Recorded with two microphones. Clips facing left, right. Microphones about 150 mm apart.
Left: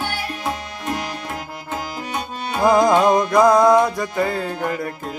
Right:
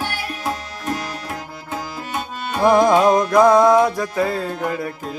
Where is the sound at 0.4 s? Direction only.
15° left (ahead or behind).